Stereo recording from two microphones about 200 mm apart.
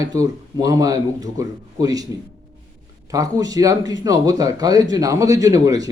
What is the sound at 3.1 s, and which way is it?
A man's voice, 15° right (ahead or behind).